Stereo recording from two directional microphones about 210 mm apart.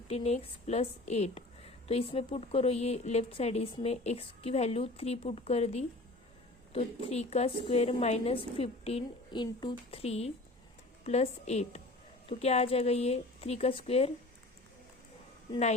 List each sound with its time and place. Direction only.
0.1 s a woman's voice: 30° left (ahead or behind)